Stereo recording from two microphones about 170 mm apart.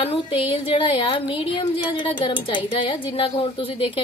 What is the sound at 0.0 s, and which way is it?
A woman's voice, 30° left (ahead or behind).